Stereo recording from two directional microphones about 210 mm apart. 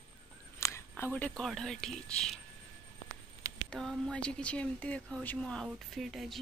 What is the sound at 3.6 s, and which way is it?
Speech, centre (ahead or behind).